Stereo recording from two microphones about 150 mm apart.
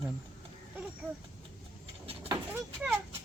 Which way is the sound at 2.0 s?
40° right (ahead or behind).